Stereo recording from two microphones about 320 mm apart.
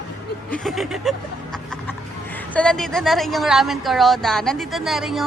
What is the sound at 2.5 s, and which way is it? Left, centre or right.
A woman's voice, centre.